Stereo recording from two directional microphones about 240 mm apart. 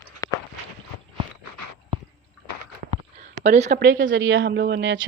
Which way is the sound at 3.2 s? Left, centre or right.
Right.